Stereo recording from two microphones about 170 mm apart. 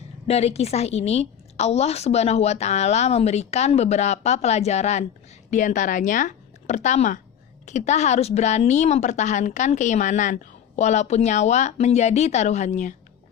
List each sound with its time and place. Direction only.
0.3 s a woman's voice: 40° left (ahead or behind)